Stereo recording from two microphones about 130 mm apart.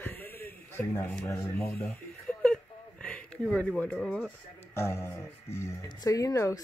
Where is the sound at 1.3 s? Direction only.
10° left (ahead or behind).